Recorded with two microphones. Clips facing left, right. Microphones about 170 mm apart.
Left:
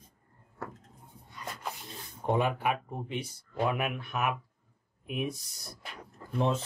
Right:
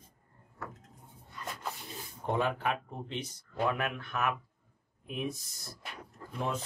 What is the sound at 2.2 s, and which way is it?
Speech, 20° left (ahead or behind).